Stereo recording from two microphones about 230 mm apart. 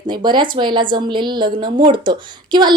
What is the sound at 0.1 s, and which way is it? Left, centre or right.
A woman's voice, centre.